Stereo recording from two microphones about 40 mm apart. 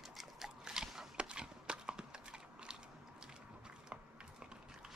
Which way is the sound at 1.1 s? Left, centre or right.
Right.